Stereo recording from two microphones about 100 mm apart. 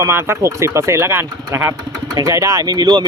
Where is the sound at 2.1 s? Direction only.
35° right (ahead or behind).